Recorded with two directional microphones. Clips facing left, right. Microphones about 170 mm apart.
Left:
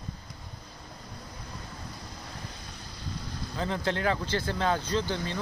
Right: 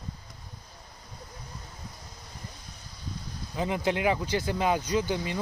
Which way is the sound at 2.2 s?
85° left.